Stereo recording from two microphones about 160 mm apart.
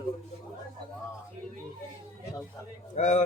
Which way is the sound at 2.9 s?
50° left (ahead or behind).